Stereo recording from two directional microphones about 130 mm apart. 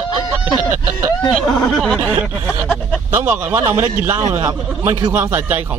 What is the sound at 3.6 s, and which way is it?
A man's voice, 25° right (ahead or behind).